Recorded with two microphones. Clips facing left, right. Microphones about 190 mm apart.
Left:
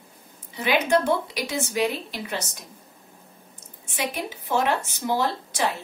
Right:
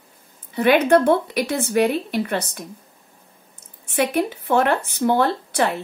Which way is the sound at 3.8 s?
60° right (ahead or behind).